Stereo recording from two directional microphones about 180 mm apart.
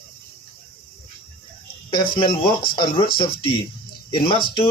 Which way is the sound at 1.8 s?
30° left (ahead or behind).